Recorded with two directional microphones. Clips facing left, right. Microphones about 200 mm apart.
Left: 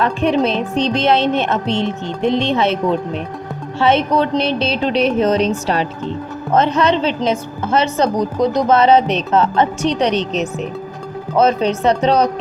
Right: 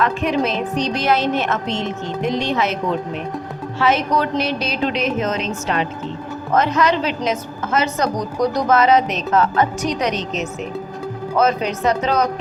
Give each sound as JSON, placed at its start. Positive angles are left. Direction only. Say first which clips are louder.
{"t": 0.0, "sound": "a woman's voice", "louder": "left 3 dB", "side_deg": 30}
{"t": 3.8, "sound": "a woman's voice", "louder": "left 4 dB", "side_deg": 30}
{"t": 6.5, "sound": "a woman's voice", "louder": "left 3 dB", "side_deg": 30}